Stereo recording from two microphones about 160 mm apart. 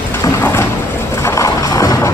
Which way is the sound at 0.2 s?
15° left (ahead or behind).